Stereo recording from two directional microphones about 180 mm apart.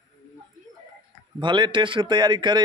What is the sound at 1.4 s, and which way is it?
A man's voice, 25° right (ahead or behind).